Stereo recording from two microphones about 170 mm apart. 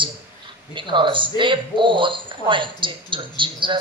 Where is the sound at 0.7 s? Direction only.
30° right (ahead or behind).